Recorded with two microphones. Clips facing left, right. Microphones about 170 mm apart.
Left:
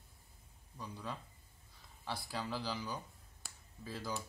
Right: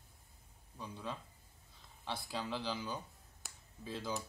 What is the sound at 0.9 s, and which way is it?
Speech, 20° right (ahead or behind).